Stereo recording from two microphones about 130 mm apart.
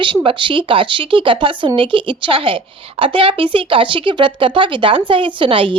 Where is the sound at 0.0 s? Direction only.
40° right (ahead or behind).